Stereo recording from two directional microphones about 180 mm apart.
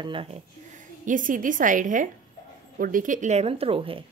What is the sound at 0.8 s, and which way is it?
A woman's voice, 45° right (ahead or behind).